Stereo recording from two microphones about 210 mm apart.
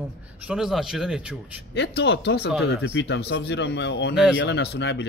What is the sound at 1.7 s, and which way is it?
Speech, 55° left (ahead or behind).